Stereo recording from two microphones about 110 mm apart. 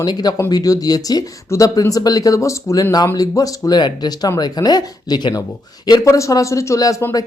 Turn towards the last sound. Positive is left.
turn(degrees=30)  # may be behind; listen again after turning